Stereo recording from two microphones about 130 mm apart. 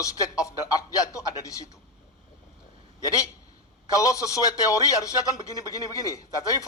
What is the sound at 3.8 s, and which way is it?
A man's voice, 25° left (ahead or behind).